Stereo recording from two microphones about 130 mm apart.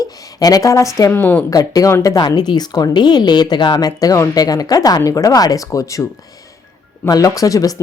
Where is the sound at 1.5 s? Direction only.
25° left (ahead or behind).